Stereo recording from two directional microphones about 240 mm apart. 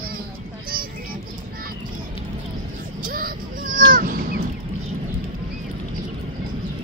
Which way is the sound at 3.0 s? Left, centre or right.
Right.